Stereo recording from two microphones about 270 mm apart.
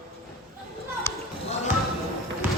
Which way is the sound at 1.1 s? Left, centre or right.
Centre.